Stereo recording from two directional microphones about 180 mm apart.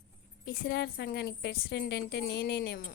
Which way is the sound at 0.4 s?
65° left (ahead or behind).